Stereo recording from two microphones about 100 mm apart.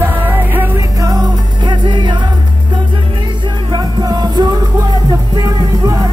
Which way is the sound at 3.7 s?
45° right (ahead or behind).